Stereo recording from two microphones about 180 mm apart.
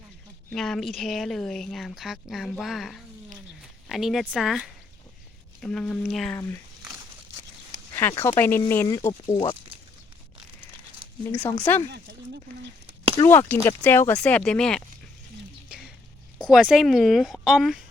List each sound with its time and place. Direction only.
0.5 s speech: 5° left (ahead or behind)
7.9 s speech: 15° left (ahead or behind)
11.3 s speech: 10° left (ahead or behind)
11.9 s speech: 65° right (ahead or behind)
13.2 s speech: 20° left (ahead or behind); by 14.8 s 5° left (ahead or behind)
16.5 s speech: 5° right (ahead or behind)